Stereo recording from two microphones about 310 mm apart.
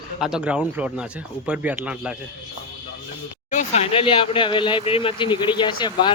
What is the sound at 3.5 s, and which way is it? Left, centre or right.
Speech, left.